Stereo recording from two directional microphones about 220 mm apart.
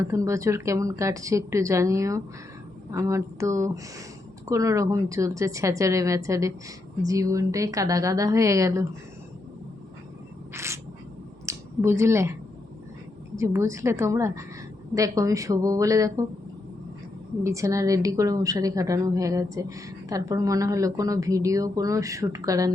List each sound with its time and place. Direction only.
0.0 s a woman's voice: 15° right (ahead or behind)
10.5 s a sound: 10° right (ahead or behind)
11.4 s speech: 10° right (ahead or behind)
13.4 s a woman's voice: 10° right (ahead or behind)
17.4 s a woman's voice: 15° right (ahead or behind)